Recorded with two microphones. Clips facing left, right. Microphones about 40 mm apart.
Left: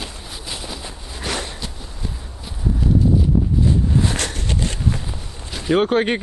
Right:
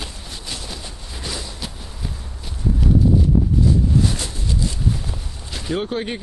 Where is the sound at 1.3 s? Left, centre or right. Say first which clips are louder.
Left 5 dB; left.